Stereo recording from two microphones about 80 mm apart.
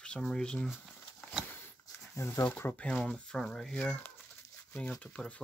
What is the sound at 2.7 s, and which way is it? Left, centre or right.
Speech, centre.